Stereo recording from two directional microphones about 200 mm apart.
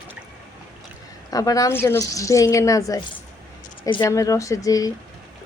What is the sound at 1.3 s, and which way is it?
Speech, 15° left (ahead or behind).